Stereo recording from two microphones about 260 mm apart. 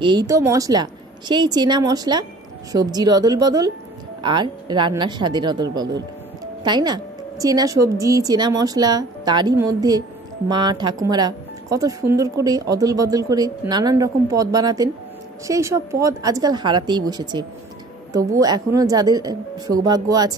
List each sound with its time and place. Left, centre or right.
0.0 s speech: centre